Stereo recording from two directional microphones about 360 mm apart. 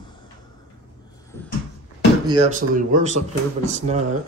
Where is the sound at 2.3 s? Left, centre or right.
Centre.